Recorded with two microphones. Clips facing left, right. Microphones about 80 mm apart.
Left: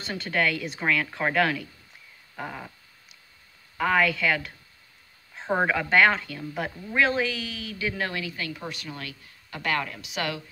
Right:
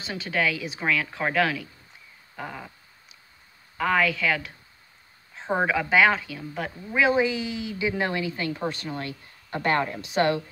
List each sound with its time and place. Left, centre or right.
0.0 s speech: centre
3.7 s speech: centre
7.0 s a woman's voice: centre; by 10.4 s right